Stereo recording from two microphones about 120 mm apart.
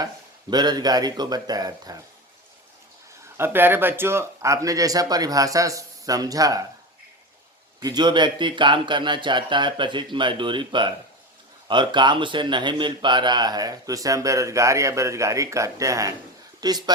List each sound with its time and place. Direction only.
0.5 s speech: 35° right (ahead or behind)
3.3 s speech: 20° right (ahead or behind)
7.8 s speech: 35° right (ahead or behind)